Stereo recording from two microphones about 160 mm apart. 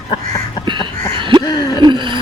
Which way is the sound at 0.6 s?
30° right (ahead or behind).